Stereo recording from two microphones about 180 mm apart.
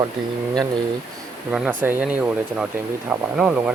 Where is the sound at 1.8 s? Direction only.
10° right (ahead or behind).